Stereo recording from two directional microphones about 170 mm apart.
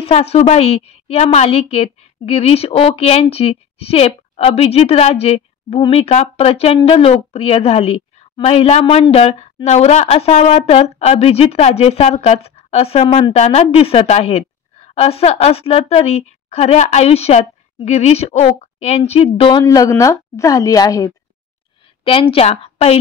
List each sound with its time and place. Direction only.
0.0 s a woman's voice: 35° left (ahead or behind)
19.6 s a woman's voice: 20° left (ahead or behind)
22.0 s a woman's voice: 35° left (ahead or behind)